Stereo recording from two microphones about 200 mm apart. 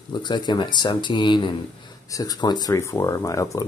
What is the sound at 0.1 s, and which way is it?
Speech, 20° left (ahead or behind).